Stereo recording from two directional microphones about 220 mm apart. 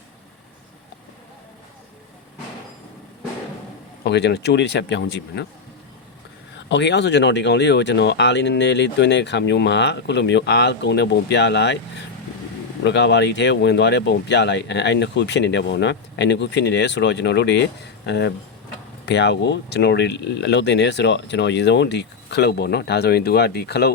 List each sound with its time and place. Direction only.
4.0 s speech: 50° left (ahead or behind)
6.7 s speech: 55° left (ahead or behind)
12.8 s speech: 50° left (ahead or behind)